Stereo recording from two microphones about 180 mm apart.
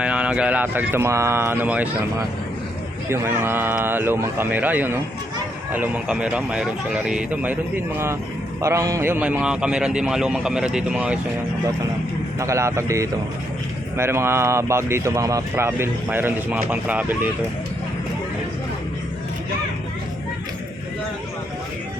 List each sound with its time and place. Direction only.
0.0 s a man's voice: 5° right (ahead or behind)
8.6 s a man's voice: 15° right (ahead or behind)
12.4 s speech: 15° right (ahead or behind)